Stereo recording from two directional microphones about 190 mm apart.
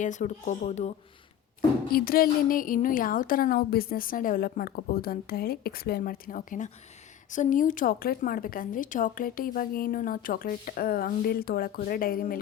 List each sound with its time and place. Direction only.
0.0 s speech: 40° left (ahead or behind)
1.9 s a woman's voice: 50° left (ahead or behind)